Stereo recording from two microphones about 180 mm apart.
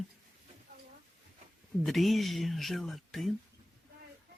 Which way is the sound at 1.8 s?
Centre (ahead or behind).